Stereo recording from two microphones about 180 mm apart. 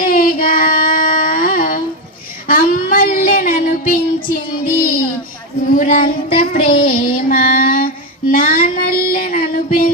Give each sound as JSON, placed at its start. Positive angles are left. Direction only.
{"t": 0.0, "sound": "child singing", "side_deg": 55}